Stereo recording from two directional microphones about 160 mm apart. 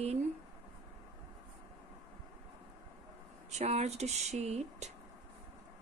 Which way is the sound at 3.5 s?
45° right (ahead or behind).